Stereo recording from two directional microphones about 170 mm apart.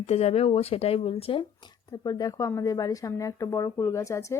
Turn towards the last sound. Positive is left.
turn(degrees=15)  # may be behind; listen again after turning